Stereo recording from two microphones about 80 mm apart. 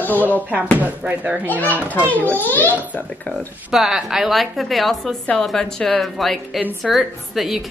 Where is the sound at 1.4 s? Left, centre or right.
Left.